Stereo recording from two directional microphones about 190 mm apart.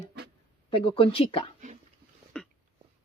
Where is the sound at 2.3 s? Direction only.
5° left (ahead or behind).